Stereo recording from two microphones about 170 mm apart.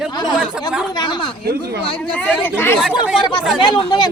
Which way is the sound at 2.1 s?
10° left (ahead or behind).